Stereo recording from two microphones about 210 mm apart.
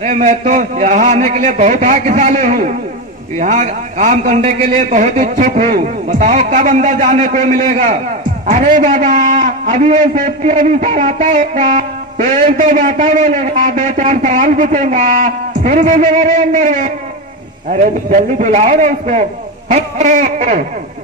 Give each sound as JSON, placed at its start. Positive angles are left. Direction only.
{"t": 0.0, "sound": "a man's voice", "side_deg": -35}